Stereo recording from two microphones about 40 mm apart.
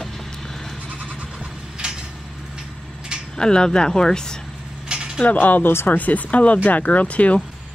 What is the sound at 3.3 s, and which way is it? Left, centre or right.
Speech, left.